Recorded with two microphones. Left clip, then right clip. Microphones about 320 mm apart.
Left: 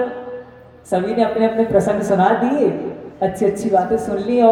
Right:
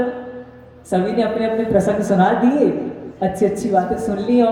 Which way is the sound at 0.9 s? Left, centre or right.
Centre.